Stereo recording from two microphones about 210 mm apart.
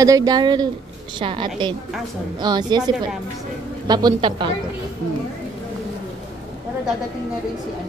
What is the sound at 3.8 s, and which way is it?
Speech, 20° right (ahead or behind).